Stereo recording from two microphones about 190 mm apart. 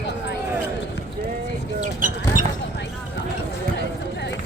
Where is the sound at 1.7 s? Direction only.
40° right (ahead or behind).